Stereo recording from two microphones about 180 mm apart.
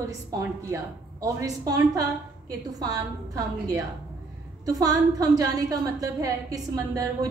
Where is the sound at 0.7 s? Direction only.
15° right (ahead or behind).